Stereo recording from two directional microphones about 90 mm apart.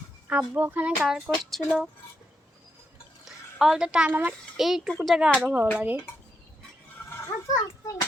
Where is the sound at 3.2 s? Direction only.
5° right (ahead or behind).